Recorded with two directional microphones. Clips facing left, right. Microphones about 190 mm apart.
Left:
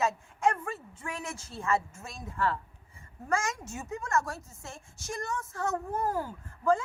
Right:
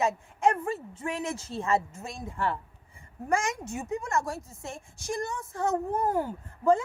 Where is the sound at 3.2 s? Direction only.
15° right (ahead or behind).